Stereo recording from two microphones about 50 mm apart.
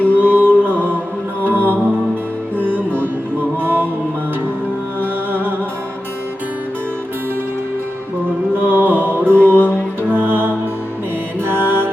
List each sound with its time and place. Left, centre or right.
0.1 s music: right
4.9 s music: right
8.5 s music: right